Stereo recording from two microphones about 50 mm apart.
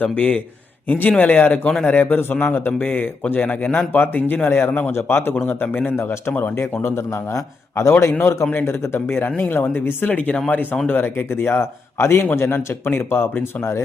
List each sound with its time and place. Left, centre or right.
0.0 s a man's voice: left
5.7 s speech: left
7.8 s a man's voice: left
8.5 s a man's voice: left
11.6 s a man's voice: left
12.5 s a man's voice: left